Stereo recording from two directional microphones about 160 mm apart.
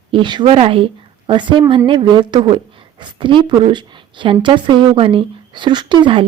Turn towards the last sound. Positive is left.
turn(degrees=-30)  # may be behind; listen again after turning